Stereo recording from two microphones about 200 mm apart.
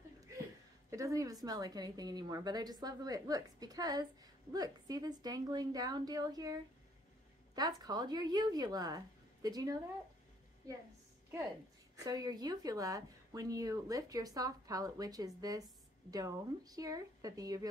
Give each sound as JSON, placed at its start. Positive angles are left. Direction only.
{"t": 0.8, "sound": "a woman's voice", "side_deg": -15}
{"t": 7.5, "sound": "a woman's voice", "side_deg": -20}
{"t": 12.0, "sound": "speech", "side_deg": -20}